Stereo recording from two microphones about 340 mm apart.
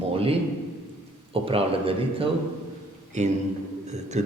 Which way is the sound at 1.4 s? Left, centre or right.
Centre.